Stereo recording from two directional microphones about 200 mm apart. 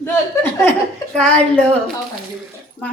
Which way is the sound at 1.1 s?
5° left (ahead or behind).